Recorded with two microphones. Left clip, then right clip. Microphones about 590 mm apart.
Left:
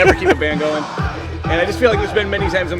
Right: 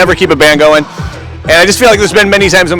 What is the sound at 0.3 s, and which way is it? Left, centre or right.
Speech, right.